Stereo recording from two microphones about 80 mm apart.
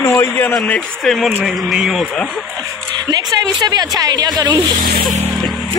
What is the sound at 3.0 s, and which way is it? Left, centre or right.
A woman's voice, right.